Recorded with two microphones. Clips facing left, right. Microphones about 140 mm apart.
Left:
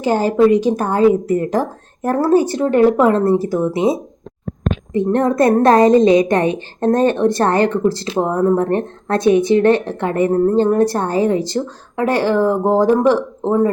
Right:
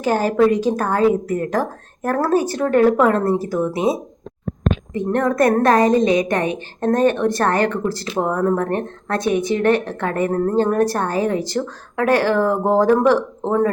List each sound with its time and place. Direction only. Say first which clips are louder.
0.0 s a woman's voice: left 3 dB; 25° left (ahead or behind)
4.9 s a woman's voice: left 4 dB; 30° left (ahead or behind)